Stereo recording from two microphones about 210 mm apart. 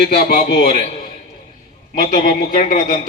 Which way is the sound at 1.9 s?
45° left (ahead or behind).